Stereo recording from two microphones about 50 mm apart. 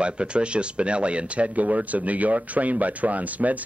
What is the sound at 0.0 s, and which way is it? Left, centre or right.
Speech, right.